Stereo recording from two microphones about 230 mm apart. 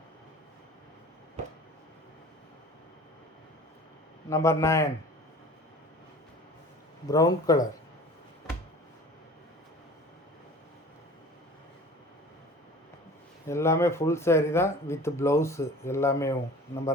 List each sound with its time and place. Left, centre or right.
4.3 s speech: centre
7.1 s speech: centre
13.5 s speech: centre